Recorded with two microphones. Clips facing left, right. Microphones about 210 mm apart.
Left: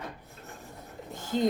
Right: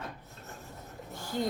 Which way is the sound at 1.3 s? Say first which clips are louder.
Left 6 dB; 20° left (ahead or behind).